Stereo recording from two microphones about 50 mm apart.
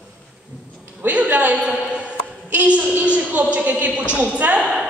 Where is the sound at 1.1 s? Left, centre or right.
Right.